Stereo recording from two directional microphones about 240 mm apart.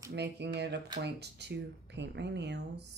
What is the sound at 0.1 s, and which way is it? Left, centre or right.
Speech, right.